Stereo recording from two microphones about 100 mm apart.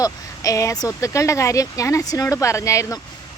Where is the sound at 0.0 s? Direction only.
35° left (ahead or behind).